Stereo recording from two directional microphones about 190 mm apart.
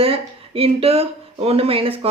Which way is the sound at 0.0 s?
30° right (ahead or behind).